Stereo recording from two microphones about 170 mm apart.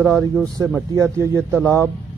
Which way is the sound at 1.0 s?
15° right (ahead or behind).